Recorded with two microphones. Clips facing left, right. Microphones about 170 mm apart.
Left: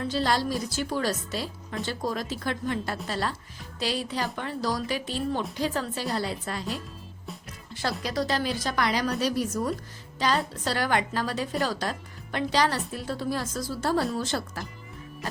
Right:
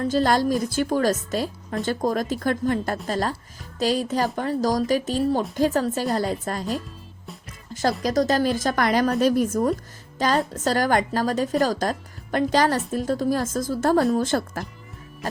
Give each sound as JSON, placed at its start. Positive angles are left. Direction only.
{"t": 0.0, "sound": "speech", "side_deg": -45}